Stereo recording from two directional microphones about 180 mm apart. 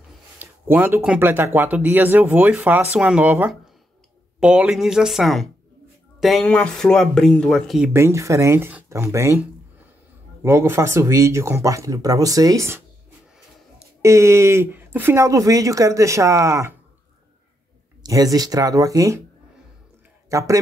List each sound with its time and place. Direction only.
0.4 s speech: 10° right (ahead or behind)
7.9 s speech: 15° right (ahead or behind)
10.4 s speech: 15° right (ahead or behind)
14.0 s speech: 15° right (ahead or behind)
18.0 s speech: 20° right (ahead or behind)
20.2 s a man's voice: 15° right (ahead or behind)